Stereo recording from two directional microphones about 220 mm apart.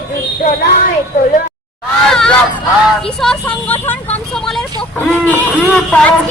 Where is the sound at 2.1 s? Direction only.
5° left (ahead or behind).